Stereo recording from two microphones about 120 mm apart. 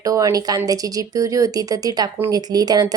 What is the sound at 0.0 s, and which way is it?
A woman's voice, 30° right (ahead or behind).